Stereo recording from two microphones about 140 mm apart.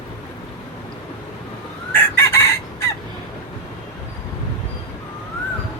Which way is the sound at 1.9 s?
20° left (ahead or behind).